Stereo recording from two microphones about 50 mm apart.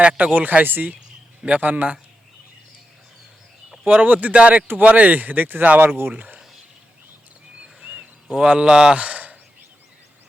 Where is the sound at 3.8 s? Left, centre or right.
Right.